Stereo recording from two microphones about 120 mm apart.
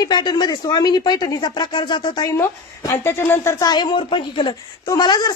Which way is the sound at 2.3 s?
20° left (ahead or behind).